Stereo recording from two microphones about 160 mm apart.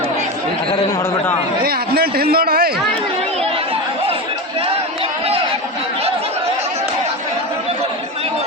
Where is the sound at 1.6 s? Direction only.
70° right (ahead or behind).